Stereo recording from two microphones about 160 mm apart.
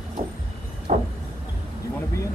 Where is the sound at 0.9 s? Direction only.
50° right (ahead or behind).